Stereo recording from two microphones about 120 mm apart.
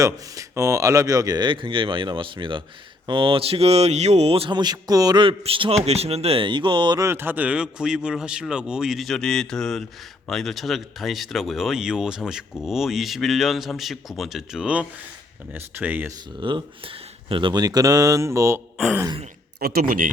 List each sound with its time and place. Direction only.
0.0 s speech: 25° right (ahead or behind); by 4.5 s 55° right (ahead or behind)
4.5 s speech: 35° right (ahead or behind)
5.4 s speech: 50° right (ahead or behind)
7.0 s speech: 20° right (ahead or behind)
16.4 s speech: 40° right (ahead or behind); by 18.6 s 25° right (ahead or behind)